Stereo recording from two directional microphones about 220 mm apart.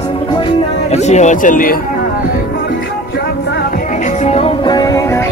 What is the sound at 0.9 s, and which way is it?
Speech, 30° left (ahead or behind).